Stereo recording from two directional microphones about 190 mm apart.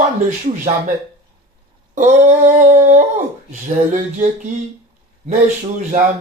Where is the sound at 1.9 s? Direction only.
40° right (ahead or behind).